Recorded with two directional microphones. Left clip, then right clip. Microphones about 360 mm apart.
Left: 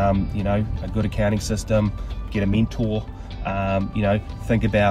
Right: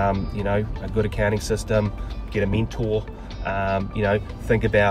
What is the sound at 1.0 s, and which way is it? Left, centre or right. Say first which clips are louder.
Speech: right 2 dB; centre.